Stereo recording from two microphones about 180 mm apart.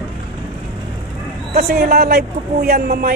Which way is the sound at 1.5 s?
60° right (ahead or behind).